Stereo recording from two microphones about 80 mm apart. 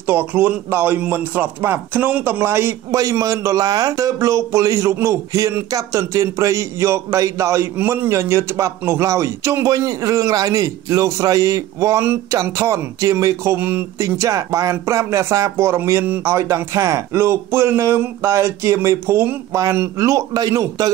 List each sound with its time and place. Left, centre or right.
0.0 s speech: right
3.0 s a man's voice: right
14.0 s a man's voice: right